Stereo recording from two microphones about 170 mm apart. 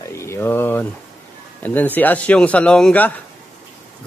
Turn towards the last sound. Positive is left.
turn(degrees=10)  # may be behind; listen again after turning